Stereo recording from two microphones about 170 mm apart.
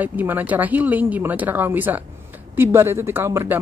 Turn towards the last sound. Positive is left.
turn(degrees=-15)  # may be behind; listen again after turning